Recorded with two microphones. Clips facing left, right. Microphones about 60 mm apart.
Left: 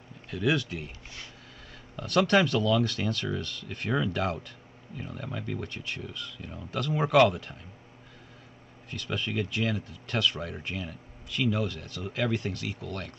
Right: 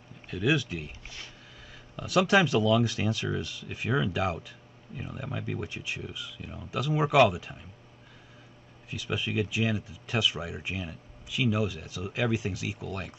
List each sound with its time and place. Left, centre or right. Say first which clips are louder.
0.3 s speech: even; centre
2.0 s speech: even; centre
8.9 s speech: right 1 dB; centre